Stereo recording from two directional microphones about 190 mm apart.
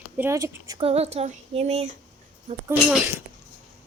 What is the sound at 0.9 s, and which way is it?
Speech, 30° right (ahead or behind).